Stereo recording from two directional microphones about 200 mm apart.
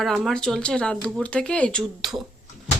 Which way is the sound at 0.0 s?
Centre (ahead or behind).